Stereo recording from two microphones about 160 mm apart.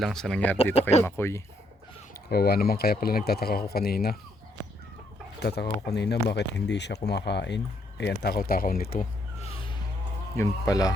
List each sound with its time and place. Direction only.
0.0 s speech: 5° left (ahead or behind)
0.8 s speech: 45° left (ahead or behind)
1.0 s speech: 15° left (ahead or behind)
2.3 s speech: 75° left (ahead or behind)
5.4 s speech: 90° left; by 9.0 s 65° left (ahead or behind)
9.4 s music: 35° left (ahead or behind)
10.3 s speech: 20° left (ahead or behind)